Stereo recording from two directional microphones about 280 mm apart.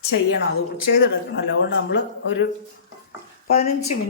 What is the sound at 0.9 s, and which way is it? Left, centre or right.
Speech, left.